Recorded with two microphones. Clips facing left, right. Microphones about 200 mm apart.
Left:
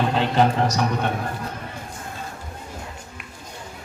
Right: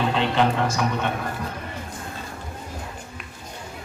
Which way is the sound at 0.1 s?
40° left (ahead or behind).